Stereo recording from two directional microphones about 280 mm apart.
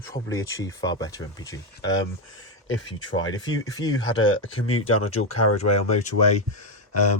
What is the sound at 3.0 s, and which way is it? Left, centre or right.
Speech, centre.